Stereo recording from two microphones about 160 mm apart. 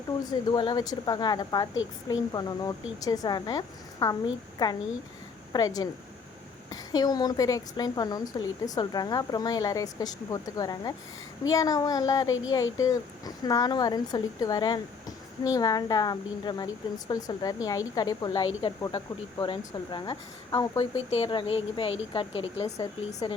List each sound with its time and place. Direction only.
0.3 s a woman's voice: 30° left (ahead or behind)
20.9 s speech: 40° left (ahead or behind)